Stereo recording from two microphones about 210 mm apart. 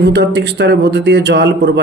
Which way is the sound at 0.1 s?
55° right (ahead or behind).